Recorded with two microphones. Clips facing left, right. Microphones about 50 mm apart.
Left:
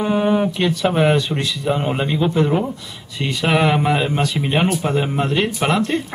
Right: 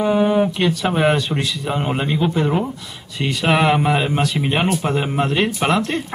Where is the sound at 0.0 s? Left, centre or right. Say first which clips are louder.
Right 1 dB; centre.